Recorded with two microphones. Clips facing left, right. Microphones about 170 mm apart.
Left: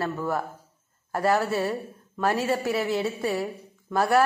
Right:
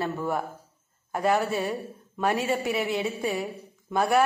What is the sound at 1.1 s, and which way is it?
Speech, 15° right (ahead or behind).